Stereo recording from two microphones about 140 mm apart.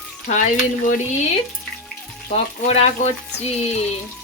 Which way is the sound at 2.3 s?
50° left (ahead or behind).